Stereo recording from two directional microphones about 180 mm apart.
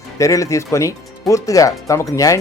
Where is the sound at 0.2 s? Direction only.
15° left (ahead or behind).